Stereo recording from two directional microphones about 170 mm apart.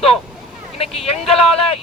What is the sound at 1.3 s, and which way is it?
Speech, 35° left (ahead or behind).